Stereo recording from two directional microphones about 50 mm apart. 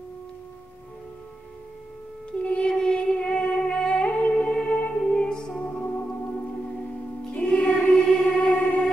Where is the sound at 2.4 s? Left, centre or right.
Left.